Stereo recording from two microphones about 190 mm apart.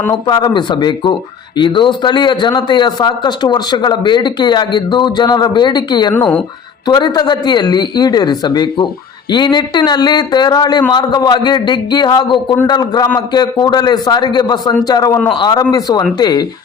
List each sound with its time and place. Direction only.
0.3 s speech: 25° left (ahead or behind)
6.1 s speech: 5° left (ahead or behind)
6.8 s speech: 20° left (ahead or behind)